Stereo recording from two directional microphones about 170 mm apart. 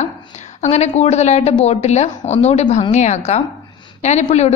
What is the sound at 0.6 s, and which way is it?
A woman's voice, 40° left (ahead or behind).